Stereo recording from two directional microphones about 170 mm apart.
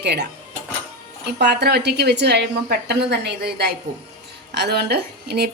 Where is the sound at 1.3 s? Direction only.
75° right (ahead or behind).